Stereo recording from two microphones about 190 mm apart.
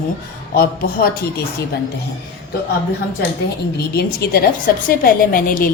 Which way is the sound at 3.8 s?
55° left (ahead or behind).